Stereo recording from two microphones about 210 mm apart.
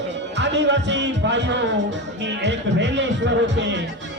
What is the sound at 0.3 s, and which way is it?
Speech, 55° right (ahead or behind).